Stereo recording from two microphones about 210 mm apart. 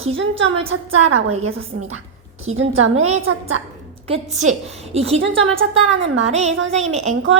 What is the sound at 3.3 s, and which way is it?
Speech, 70° right (ahead or behind).